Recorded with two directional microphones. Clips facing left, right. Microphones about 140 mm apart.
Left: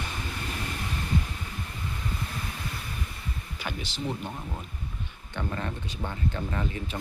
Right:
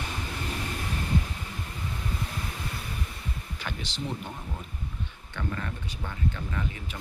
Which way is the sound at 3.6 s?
10° left (ahead or behind).